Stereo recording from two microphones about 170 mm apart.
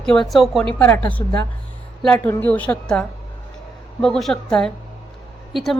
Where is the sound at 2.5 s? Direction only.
5° left (ahead or behind).